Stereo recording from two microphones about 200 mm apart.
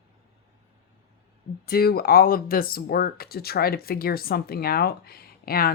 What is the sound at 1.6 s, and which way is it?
Speech, 50° left (ahead or behind).